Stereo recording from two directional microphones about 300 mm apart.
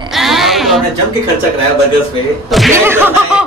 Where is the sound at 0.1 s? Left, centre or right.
Centre.